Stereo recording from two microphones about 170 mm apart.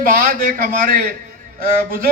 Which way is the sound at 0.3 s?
55° right (ahead or behind).